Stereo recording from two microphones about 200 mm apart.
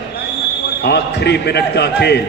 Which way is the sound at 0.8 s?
55° left (ahead or behind).